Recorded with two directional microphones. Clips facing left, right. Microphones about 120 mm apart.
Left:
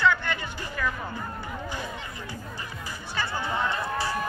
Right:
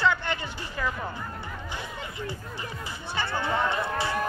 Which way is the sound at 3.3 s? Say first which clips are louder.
Right 4 dB; 10° left (ahead or behind).